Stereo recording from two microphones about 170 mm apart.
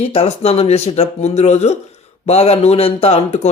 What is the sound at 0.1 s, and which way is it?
Speech, 35° left (ahead or behind).